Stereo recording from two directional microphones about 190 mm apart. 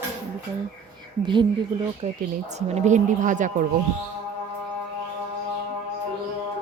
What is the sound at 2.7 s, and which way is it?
Speech, 35° right (ahead or behind).